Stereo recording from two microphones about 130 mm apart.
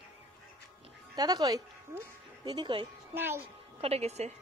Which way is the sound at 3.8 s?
55° right (ahead or behind).